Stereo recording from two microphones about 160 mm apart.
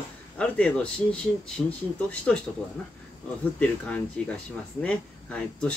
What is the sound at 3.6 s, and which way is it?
Speech, 10° left (ahead or behind).